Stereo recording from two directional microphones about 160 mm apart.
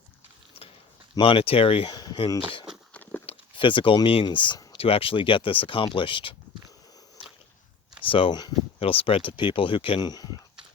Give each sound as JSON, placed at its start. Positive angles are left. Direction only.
{"t": 1.2, "sound": "speech", "side_deg": 35}
{"t": 2.9, "sound": "walk", "side_deg": 10}
{"t": 3.2, "sound": "speech", "side_deg": 30}
{"t": 8.0, "sound": "speech", "side_deg": 35}